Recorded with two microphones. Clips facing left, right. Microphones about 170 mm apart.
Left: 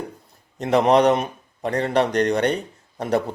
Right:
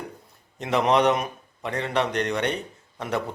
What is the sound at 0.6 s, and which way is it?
A man's voice, 40° left (ahead or behind).